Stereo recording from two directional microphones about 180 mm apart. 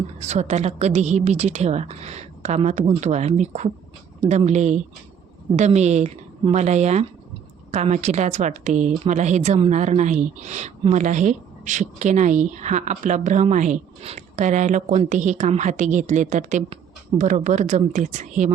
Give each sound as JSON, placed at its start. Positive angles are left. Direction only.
{"t": 0.2, "sound": "a woman's voice", "side_deg": -40}